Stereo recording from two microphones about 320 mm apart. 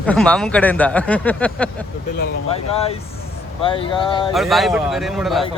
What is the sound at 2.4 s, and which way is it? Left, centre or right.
Speech, centre.